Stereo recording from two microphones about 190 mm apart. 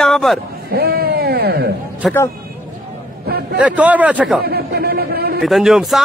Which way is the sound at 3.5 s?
5° right (ahead or behind).